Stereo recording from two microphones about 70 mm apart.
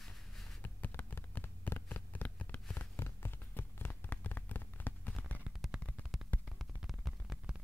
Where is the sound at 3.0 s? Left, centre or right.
Left.